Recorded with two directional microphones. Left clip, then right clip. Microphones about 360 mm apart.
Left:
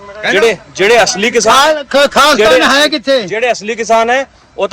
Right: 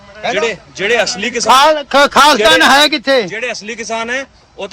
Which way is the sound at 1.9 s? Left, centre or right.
Centre.